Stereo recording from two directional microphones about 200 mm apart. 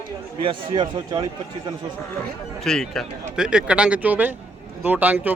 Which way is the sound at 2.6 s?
Centre (ahead or behind).